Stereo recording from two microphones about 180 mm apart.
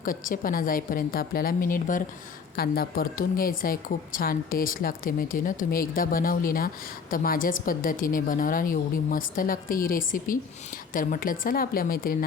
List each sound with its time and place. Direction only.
0.0 s a woman's voice: 50° left (ahead or behind)